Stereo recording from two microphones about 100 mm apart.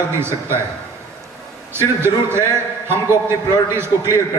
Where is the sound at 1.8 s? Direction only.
25° right (ahead or behind).